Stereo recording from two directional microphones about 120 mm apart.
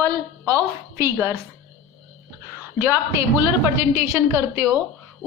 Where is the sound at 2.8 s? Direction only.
20° right (ahead or behind).